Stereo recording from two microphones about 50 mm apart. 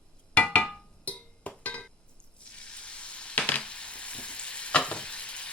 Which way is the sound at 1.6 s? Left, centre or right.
Left.